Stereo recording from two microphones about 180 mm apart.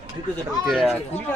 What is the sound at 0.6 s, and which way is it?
Speech, centre (ahead or behind).